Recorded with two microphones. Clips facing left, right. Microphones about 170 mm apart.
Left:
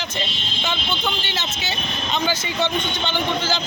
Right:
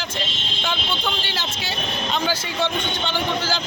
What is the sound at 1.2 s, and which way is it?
A man's voice, centre (ahead or behind).